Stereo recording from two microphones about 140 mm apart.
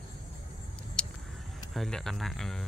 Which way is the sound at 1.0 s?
5° left (ahead or behind).